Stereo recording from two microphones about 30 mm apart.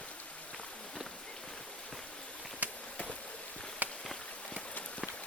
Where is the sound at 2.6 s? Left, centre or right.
Right.